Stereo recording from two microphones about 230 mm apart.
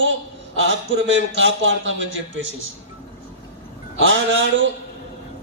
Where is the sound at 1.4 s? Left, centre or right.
Right.